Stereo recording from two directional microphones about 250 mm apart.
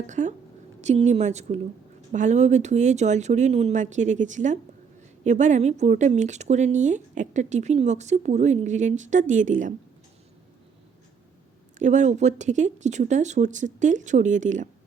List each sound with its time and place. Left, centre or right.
0.1 s speech: right
11.8 s speech: right